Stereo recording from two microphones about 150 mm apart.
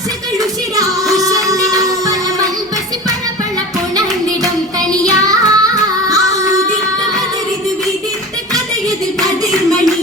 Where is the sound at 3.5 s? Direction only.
25° right (ahead or behind).